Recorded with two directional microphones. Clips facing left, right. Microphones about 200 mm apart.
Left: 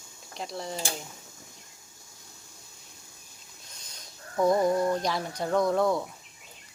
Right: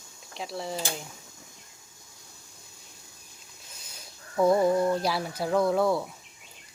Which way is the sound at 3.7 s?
5° right (ahead or behind).